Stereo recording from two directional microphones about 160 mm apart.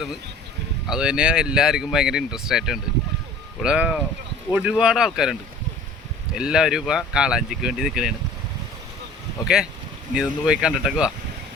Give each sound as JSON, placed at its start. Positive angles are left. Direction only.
{"t": 0.9, "sound": "speech", "side_deg": -5}
{"t": 10.2, "sound": "speech", "side_deg": -5}